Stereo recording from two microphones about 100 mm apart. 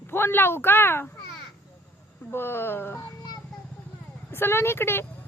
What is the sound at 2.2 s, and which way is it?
Speech, 20° left (ahead or behind).